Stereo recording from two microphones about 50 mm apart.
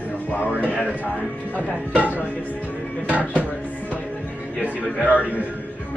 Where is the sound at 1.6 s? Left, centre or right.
Right.